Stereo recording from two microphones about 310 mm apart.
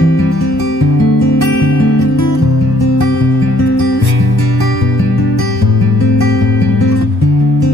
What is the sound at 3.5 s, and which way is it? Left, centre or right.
Music, left.